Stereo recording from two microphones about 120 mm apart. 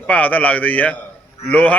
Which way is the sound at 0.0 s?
10° left (ahead or behind).